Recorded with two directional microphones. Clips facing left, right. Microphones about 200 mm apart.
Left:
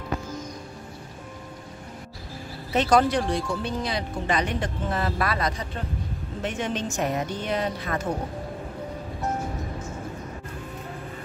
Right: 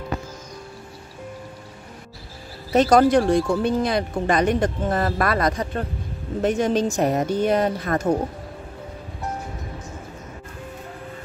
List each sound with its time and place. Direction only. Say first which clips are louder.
2.7 s a woman's voice: right 6 dB; 40° right (ahead or behind)